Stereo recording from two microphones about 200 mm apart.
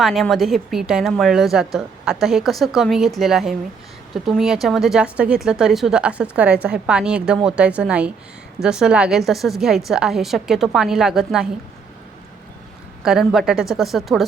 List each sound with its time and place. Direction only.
0.0 s a woman's voice: centre (ahead or behind)
13.0 s a woman's voice: centre (ahead or behind)